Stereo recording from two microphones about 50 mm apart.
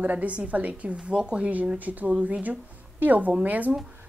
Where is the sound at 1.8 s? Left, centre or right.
Right.